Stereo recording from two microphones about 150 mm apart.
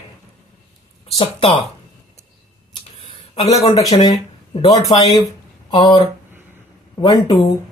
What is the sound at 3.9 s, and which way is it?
Speech, 35° left (ahead or behind).